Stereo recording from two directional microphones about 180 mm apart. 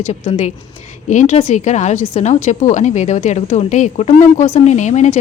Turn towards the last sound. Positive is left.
turn(degrees=40)  # may be behind; listen again after turning